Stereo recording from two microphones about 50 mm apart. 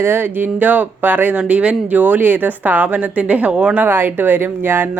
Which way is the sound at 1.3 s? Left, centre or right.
Right.